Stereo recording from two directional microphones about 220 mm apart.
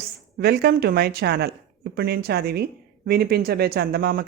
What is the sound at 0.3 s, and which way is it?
Speech, 45° right (ahead or behind).